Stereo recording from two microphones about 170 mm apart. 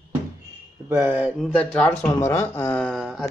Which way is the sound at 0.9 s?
15° right (ahead or behind).